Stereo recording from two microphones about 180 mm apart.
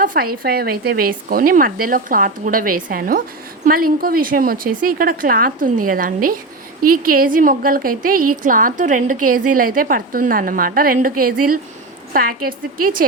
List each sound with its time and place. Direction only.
0.0 s speech: 50° right (ahead or behind)